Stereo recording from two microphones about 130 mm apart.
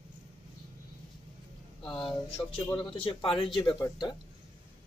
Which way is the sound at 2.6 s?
35° left (ahead or behind).